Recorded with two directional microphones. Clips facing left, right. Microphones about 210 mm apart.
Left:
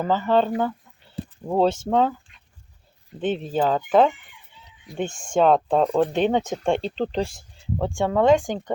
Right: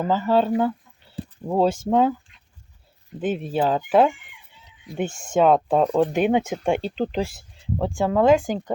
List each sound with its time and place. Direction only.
0.0 s speech: 5° right (ahead or behind)
3.2 s speech: 10° right (ahead or behind)